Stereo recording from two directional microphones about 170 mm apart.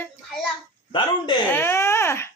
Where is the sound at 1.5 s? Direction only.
15° left (ahead or behind).